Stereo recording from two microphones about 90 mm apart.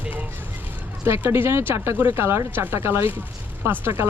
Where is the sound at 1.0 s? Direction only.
25° right (ahead or behind).